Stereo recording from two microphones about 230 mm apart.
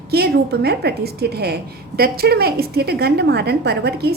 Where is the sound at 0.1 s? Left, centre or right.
Right.